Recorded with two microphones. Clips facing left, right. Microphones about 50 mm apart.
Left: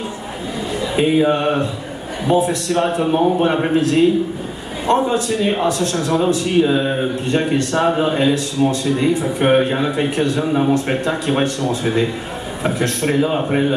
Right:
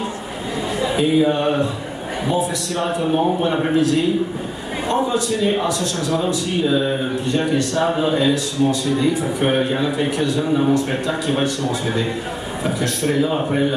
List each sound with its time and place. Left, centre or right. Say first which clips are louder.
0.9 s speech: left 2 dB; left
2.2 s a man's voice: left 5 dB; left
7.2 s a man's voice: left 1 dB; left
12.6 s a man's voice: left 2 dB; left